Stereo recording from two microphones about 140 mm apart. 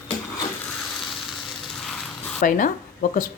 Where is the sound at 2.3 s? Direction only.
70° left (ahead or behind).